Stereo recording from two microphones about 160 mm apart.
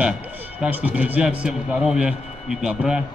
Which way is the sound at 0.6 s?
10° right (ahead or behind).